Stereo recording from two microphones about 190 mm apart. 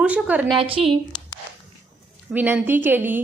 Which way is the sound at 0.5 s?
30° right (ahead or behind).